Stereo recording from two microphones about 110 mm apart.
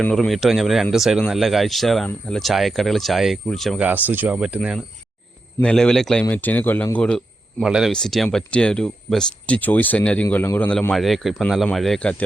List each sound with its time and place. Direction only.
0.0 s speech: 10° left (ahead or behind)
3.8 s speech: 15° right (ahead or behind)
5.6 s speech: 5° left (ahead or behind)
7.6 s speech: 5° right (ahead or behind); by 10.2 s 10° left (ahead or behind)
10.2 s speech: 20° left (ahead or behind)
10.9 s speech: centre (ahead or behind)